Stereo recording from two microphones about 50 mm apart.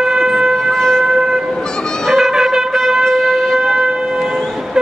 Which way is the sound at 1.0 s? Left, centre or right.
Centre.